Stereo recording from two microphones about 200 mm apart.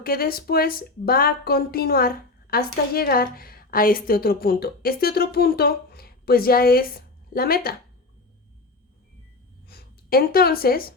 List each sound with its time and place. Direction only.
0.0 s speech: 50° left (ahead or behind)
9.6 s speech: 50° left (ahead or behind)